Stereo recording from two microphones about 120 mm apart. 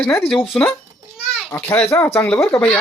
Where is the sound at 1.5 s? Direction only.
15° left (ahead or behind).